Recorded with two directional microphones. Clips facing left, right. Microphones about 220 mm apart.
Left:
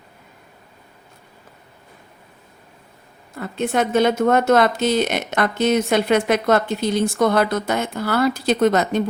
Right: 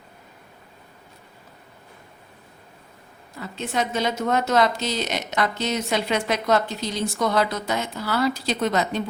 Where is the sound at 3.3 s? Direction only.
55° left (ahead or behind).